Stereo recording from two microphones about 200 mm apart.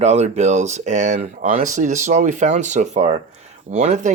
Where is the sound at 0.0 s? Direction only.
35° right (ahead or behind).